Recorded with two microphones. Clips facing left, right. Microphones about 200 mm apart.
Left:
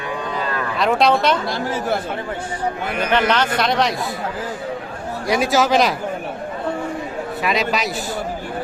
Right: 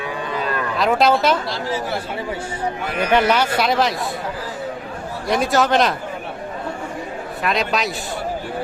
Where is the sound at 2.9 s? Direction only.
10° right (ahead or behind).